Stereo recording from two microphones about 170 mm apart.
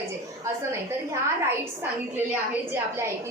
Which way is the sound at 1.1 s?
15° right (ahead or behind).